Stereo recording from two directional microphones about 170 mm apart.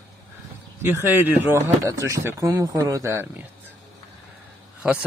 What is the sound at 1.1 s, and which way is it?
A man's voice, 10° right (ahead or behind).